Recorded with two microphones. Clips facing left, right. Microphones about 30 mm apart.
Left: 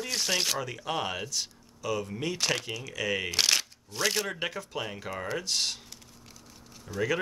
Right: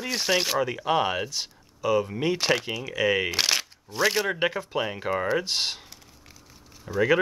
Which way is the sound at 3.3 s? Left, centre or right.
Centre.